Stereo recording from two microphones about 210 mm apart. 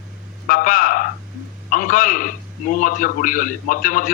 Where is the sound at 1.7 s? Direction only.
40° left (ahead or behind).